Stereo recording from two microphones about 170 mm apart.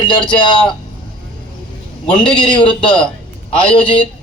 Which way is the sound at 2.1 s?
30° left (ahead or behind).